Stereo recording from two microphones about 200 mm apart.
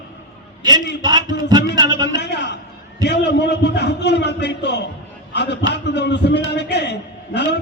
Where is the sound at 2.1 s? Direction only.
60° left (ahead or behind).